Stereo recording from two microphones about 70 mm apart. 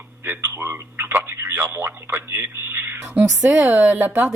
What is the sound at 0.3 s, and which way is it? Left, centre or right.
A woman's voice, right.